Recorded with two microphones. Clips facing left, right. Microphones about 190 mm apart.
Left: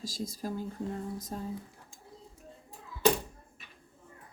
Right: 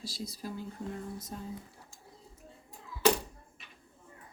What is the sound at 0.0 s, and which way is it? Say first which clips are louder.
Speech: left 4 dB; 45° left (ahead or behind).